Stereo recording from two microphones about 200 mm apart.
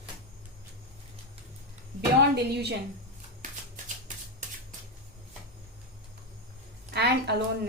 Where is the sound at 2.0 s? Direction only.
55° right (ahead or behind).